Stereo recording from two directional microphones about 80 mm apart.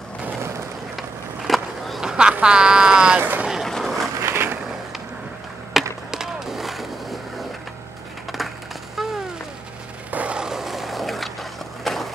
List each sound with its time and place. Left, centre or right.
1.5 s skateboard: centre
2.3 s a sound: centre
3.2 s speech: right
3.6 s vehicle: centre
4.2 s vehicle: right
5.7 s skateboard: centre
8.9 s a sound: centre
10.1 s skateboard: centre
11.8 s a sound: centre